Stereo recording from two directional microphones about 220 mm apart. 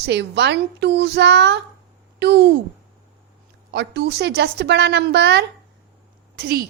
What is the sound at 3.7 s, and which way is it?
A woman's voice, 50° right (ahead or behind).